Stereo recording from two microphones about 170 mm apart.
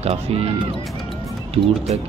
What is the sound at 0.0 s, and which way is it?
Speech, 35° right (ahead or behind).